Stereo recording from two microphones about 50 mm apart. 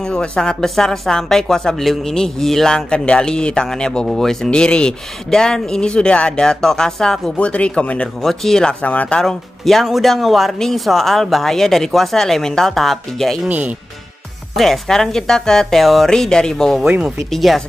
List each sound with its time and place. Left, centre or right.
0.0 s speech: centre
2.9 s speech: centre
4.5 s speech: centre
7.3 s speech: left
8.2 s speech: centre
8.8 s speech: left
9.3 s speech: centre
13.5 s speech: right
14.5 s speech: centre
16.1 s speech: centre